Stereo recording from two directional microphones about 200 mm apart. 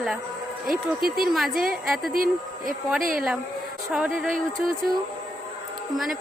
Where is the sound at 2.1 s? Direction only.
45° right (ahead or behind).